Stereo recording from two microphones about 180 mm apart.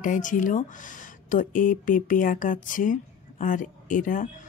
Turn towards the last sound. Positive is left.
turn(degrees=45)  # may be behind; listen again after turning